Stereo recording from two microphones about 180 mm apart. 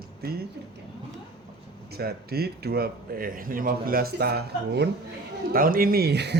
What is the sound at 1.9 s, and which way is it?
Speech, 60° right (ahead or behind).